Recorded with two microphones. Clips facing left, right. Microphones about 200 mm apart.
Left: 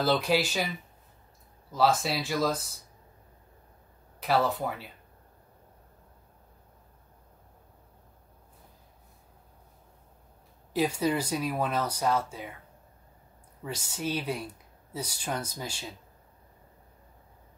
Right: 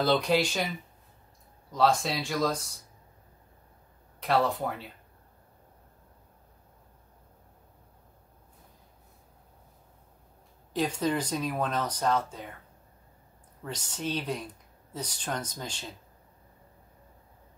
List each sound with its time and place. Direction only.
0.0 s speech: 5° left (ahead or behind)
1.7 s speech: 5° left (ahead or behind)
4.2 s speech: 5° left (ahead or behind)
10.7 s speech: 10° left (ahead or behind)
13.7 s speech: 10° left (ahead or behind)